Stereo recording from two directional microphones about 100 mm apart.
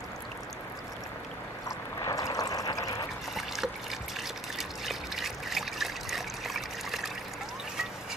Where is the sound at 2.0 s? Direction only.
35° left (ahead or behind).